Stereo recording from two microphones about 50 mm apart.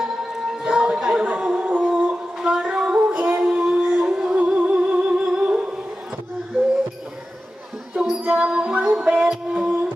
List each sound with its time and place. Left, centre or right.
0.0 s music: centre
0.9 s chatter: centre
1.4 s howl: centre
2.0 s female singing: centre
5.4 s music: right
7.9 s music: centre